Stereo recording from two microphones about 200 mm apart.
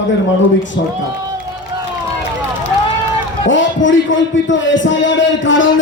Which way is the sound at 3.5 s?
70° left (ahead or behind).